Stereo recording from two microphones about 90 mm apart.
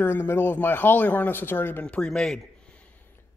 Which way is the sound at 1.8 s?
10° left (ahead or behind).